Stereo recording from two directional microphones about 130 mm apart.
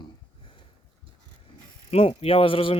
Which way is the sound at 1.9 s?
50° left (ahead or behind).